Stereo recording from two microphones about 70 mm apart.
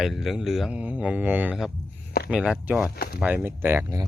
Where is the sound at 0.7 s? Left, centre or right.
Centre.